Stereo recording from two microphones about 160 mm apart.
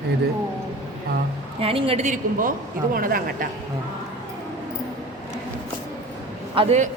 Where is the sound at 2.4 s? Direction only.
60° right (ahead or behind).